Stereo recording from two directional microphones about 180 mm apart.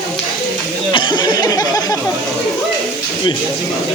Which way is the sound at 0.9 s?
25° left (ahead or behind).